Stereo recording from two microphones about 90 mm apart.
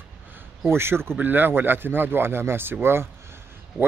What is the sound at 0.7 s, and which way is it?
A man's voice, 25° right (ahead or behind).